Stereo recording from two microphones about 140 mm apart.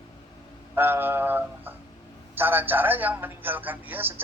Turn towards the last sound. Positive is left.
turn(degrees=-15)  # may be behind; listen again after turning